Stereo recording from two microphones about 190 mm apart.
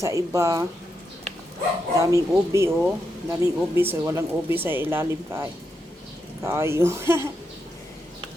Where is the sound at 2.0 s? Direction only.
15° right (ahead or behind).